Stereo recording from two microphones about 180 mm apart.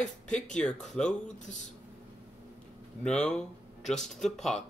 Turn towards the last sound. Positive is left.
turn(degrees=0)  # may be behind; listen again after turning